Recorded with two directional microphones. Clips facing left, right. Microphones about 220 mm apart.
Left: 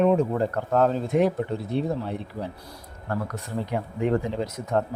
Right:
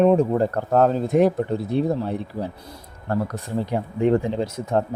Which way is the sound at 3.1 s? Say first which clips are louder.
Right 5 dB; 35° right (ahead or behind).